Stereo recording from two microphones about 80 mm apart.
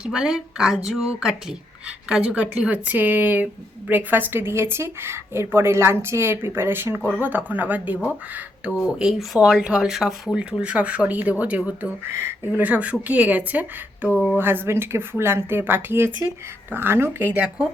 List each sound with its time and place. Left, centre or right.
0.0 s a woman's voice: centre
9.0 s a woman's voice: centre
14.1 s a sound: left
14.3 s a woman's voice: right